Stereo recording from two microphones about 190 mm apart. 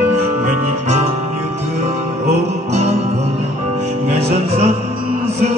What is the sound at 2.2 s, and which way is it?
Music, 35° right (ahead or behind).